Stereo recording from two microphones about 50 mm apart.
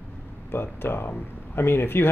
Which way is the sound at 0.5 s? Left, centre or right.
Left.